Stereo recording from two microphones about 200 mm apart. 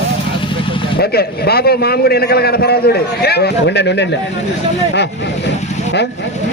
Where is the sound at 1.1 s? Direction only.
50° left (ahead or behind).